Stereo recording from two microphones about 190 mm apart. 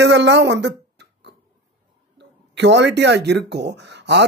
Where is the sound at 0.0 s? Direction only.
70° right (ahead or behind).